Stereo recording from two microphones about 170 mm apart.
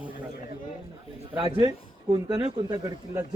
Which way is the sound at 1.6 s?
20° right (ahead or behind).